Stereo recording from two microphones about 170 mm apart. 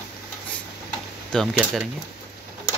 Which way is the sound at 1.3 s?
Centre (ahead or behind).